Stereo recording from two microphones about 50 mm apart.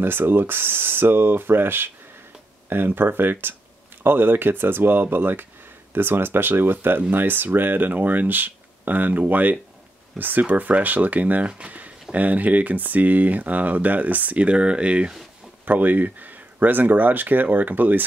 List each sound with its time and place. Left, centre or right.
0.0 s speech: right
15.6 s speech: right